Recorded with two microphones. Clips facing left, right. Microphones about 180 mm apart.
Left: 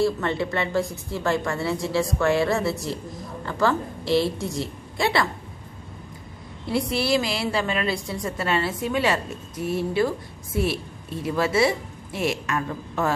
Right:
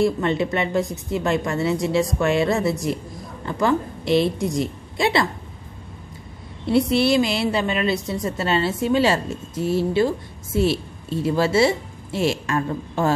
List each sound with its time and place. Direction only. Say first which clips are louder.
0.0 s a woman's voice: right 3 dB; 20° right (ahead or behind)
6.6 s a woman's voice: right 7 dB; 25° right (ahead or behind)